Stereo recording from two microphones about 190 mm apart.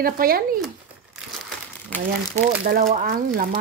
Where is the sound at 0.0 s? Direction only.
50° right (ahead or behind).